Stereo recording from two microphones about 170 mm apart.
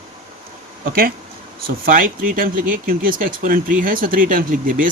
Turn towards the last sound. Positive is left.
turn(degrees=-55)  # may be behind; listen again after turning